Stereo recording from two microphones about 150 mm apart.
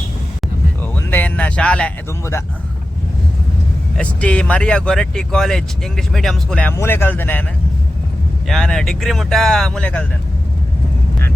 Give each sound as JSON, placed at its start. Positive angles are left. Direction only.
{"t": 0.8, "sound": "a sound", "side_deg": 15}
{"t": 2.3, "sound": "speech", "side_deg": 20}
{"t": 3.9, "sound": "speech", "side_deg": 10}
{"t": 8.4, "sound": "speech", "side_deg": 5}